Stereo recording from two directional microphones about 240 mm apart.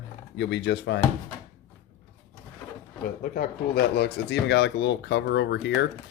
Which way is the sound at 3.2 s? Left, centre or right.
Left.